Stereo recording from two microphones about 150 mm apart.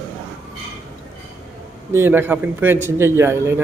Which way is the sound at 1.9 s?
15° right (ahead or behind).